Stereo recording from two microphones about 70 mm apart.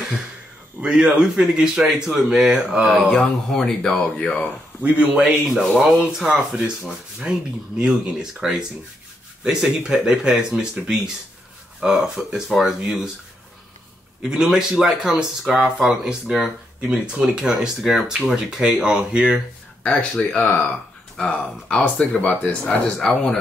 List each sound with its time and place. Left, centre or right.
0.8 s speech: centre
4.8 s speech: centre
14.2 s speech: centre
19.8 s speech: centre
21.2 s speech: centre
23.0 s speech: centre